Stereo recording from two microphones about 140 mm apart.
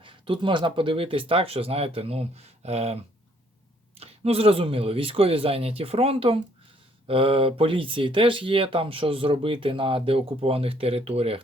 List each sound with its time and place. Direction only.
0.0 s speech: 35° right (ahead or behind)